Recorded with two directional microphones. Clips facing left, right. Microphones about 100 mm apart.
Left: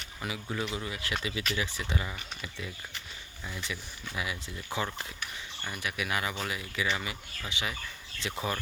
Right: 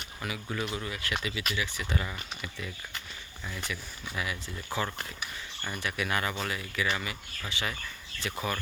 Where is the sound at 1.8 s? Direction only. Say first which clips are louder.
Right 1 dB; 20° left (ahead or behind).